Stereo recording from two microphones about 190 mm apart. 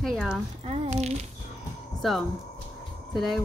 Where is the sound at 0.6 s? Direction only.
35° right (ahead or behind).